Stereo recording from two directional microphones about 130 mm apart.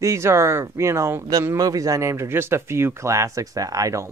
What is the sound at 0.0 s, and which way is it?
Speech, 20° right (ahead or behind).